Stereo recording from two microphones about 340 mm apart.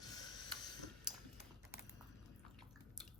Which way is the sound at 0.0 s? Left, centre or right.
Centre.